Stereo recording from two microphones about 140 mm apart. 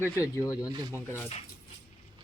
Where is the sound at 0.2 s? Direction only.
20° left (ahead or behind).